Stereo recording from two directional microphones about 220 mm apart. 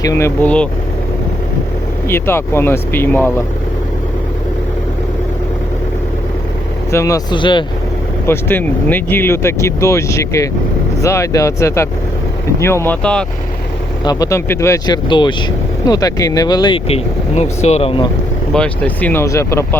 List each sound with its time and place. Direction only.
0.0 s speech: 15° left (ahead or behind)
2.0 s speech: 10° left (ahead or behind)
6.9 s speech: 15° left (ahead or behind)
8.3 s speech: 10° left (ahead or behind)
14.0 s speech: 15° left (ahead or behind)
18.5 s speech: 5° left (ahead or behind)